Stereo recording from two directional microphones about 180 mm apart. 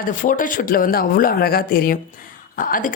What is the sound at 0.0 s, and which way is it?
A woman's voice, 45° left (ahead or behind).